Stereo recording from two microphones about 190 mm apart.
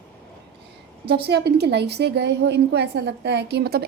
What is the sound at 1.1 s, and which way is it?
A woman's voice, 60° right (ahead or behind).